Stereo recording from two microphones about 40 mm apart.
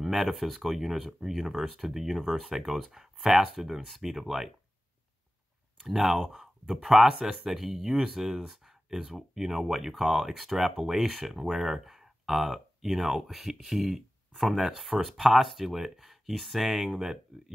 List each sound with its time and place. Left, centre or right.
0.0 s speech: centre
5.9 s speech: centre
8.5 s a sound: centre
9.3 s speech: centre